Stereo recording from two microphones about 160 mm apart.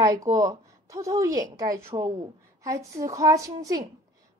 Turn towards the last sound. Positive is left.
turn(degrees=-20)  # may be behind; listen again after turning